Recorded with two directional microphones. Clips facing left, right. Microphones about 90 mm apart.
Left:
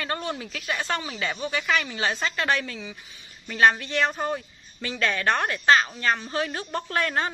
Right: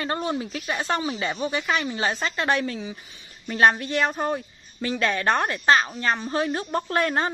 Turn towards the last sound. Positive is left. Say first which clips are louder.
# right 3 dB
turn(degrees=-30)  # may be behind; listen again after turning